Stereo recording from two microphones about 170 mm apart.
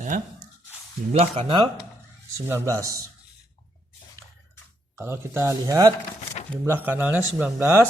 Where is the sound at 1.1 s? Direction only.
35° right (ahead or behind).